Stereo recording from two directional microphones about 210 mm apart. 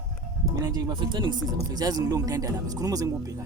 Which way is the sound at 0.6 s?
20° right (ahead or behind).